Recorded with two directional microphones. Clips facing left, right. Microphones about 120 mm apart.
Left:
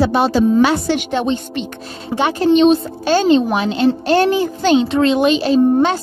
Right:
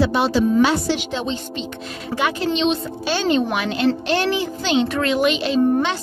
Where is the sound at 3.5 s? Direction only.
30° left (ahead or behind).